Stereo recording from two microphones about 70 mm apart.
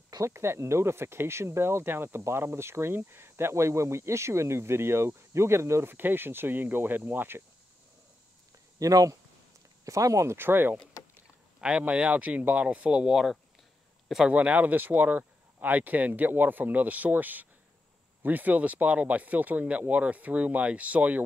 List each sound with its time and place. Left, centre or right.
0.2 s speech: right
8.7 s speech: right
10.3 s speech: right
11.6 s speech: centre
13.1 s speech: centre
14.3 s speech: right